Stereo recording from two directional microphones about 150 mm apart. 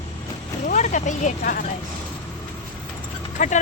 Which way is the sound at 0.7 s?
55° left (ahead or behind).